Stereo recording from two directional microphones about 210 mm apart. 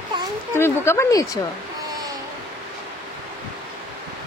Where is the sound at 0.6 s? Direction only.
10° left (ahead or behind).